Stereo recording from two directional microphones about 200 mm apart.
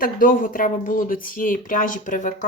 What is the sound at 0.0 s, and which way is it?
Speech, 45° left (ahead or behind).